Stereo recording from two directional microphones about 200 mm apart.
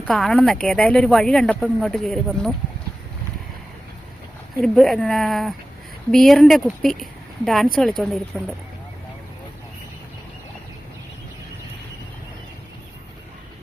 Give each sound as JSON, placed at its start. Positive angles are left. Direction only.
{"t": 0.1, "sound": "speech", "side_deg": 0}
{"t": 4.6, "sound": "speech", "side_deg": 0}